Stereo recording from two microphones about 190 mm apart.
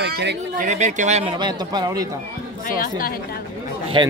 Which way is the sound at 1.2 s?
20° right (ahead or behind).